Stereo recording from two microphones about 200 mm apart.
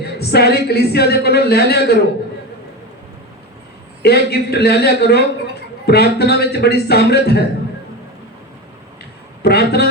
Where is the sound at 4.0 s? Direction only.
55° left (ahead or behind).